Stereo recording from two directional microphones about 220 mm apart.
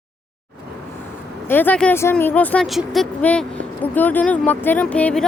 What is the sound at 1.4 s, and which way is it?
Speech, 10° left (ahead or behind).